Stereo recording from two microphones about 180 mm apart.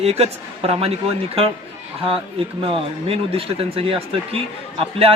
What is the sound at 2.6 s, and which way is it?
Speech, 30° right (ahead or behind).